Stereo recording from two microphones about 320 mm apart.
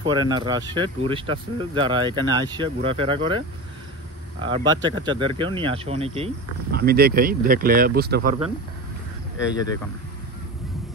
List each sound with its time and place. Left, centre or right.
0.0 s speech: centre
6.7 s speech: right